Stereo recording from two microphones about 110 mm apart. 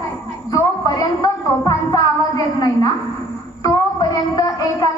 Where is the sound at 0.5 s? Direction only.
35° left (ahead or behind).